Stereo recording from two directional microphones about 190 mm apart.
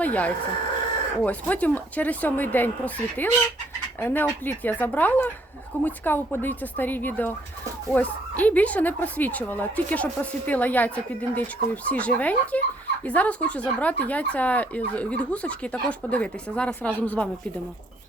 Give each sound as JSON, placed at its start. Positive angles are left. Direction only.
{"t": 0.0, "sound": "speech", "side_deg": 10}